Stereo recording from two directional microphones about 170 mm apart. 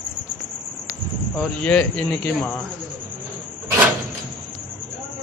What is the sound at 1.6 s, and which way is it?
Speech, 5° left (ahead or behind).